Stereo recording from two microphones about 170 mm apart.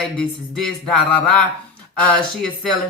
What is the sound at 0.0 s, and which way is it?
Speech, centre (ahead or behind).